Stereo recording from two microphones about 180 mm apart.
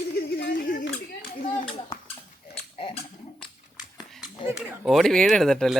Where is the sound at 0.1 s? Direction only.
65° left (ahead or behind).